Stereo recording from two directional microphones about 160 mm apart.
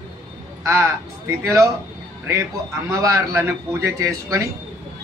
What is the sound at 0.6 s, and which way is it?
A man's voice, 15° right (ahead or behind).